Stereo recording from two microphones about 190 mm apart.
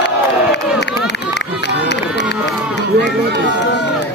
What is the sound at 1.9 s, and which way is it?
Run, 65° left (ahead or behind).